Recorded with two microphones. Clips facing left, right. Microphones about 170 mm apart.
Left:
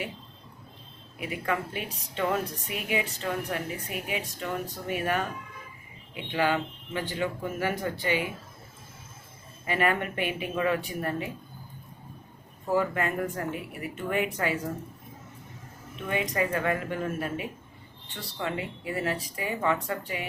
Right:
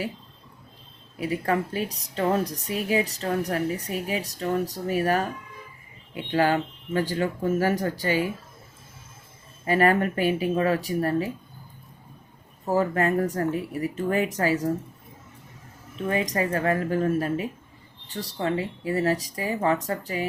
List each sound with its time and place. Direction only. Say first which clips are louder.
1.2 s a woman's voice: right 5 dB; 40° right (ahead or behind)
6.3 s a woman's voice: right 4 dB; 45° right (ahead or behind)
9.6 s a woman's voice: right 6 dB; 40° right (ahead or behind)
12.7 s a woman's voice: right 4 dB; 40° right (ahead or behind)
16.0 s a woman's voice: right 3 dB; 35° right (ahead or behind)